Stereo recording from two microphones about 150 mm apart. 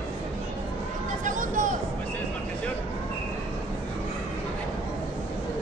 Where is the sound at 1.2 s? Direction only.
60° right (ahead or behind).